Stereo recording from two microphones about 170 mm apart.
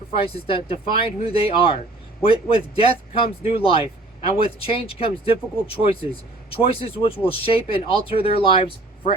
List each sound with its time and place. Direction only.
0.3 s speech: 35° left (ahead or behind)